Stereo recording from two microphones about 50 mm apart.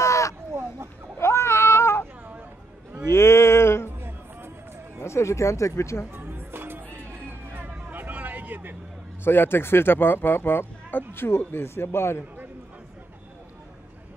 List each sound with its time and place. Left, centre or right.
0.0 s a sound: left
1.1 s a sound: left
3.1 s music: left
5.0 s speech: left
6.1 s music: right
7.9 s vehicle: right
9.2 s speech: left